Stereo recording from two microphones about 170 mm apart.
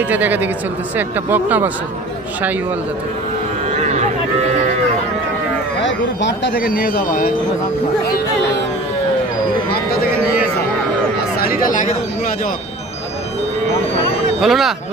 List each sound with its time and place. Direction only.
0.1 s speech: 10° right (ahead or behind)
5.9 s speech: 90° left; by 7.3 s 60° left (ahead or behind)
11.6 s speech: 50° left (ahead or behind)
14.4 s speech: centre (ahead or behind)